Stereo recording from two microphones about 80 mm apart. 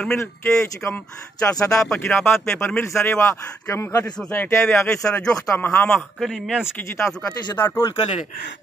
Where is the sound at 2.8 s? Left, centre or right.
Left.